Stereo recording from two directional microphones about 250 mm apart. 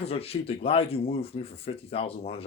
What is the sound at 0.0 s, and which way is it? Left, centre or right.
Speech, left.